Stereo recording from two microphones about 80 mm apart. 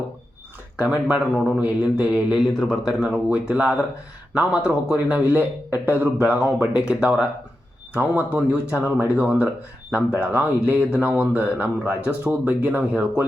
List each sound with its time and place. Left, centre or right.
0.8 s a man's voice: centre
2.5 s speech: centre
2.8 s a man's voice: centre